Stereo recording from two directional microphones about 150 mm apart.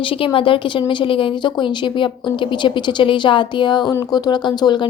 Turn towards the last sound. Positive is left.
turn(degrees=30)  # may be behind; listen again after turning